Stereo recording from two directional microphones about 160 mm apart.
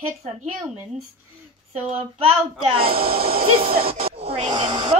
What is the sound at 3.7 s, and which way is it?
Speech, 70° right (ahead or behind).